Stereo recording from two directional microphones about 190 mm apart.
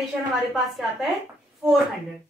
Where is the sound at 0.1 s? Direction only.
Centre (ahead or behind).